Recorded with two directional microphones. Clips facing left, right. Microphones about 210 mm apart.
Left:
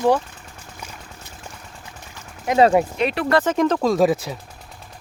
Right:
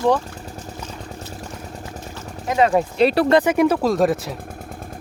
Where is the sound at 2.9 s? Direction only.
35° right (ahead or behind).